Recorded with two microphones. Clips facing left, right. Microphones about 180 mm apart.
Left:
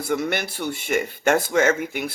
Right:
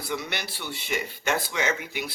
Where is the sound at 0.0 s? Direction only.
50° left (ahead or behind).